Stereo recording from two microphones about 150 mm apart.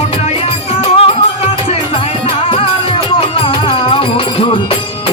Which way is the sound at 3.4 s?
35° left (ahead or behind).